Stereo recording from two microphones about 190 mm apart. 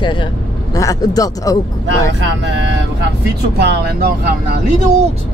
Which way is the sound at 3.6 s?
55° right (ahead or behind).